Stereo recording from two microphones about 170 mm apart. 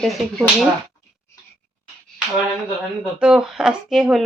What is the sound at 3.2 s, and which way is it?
A woman's voice, 5° right (ahead or behind).